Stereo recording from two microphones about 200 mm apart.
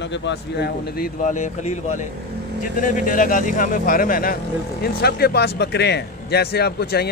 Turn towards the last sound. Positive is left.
turn(degrees=55)  # may be behind; listen again after turning